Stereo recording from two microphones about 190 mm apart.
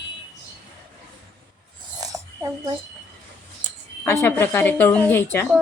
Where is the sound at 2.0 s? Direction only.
20° right (ahead or behind).